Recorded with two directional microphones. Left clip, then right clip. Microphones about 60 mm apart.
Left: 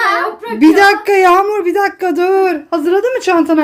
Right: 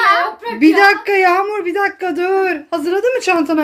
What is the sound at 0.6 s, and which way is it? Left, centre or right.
Speech, left.